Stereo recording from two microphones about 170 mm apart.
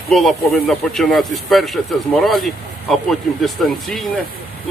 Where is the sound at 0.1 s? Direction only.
Centre (ahead or behind).